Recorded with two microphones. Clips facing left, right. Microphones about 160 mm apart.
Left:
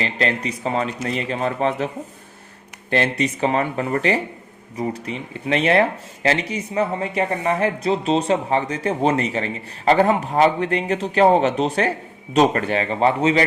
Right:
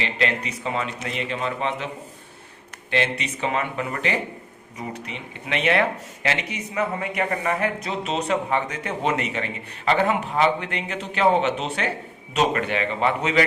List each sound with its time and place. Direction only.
0.0 s speech: 35° left (ahead or behind)
2.9 s speech: 40° left (ahead or behind)